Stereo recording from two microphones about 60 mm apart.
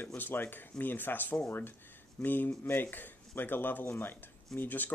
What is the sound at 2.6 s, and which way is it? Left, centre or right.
Speech, left.